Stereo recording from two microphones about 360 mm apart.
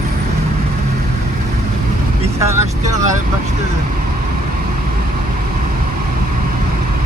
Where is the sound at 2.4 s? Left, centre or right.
Centre.